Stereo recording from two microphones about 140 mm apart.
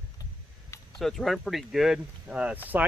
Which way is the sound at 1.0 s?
Centre (ahead or behind).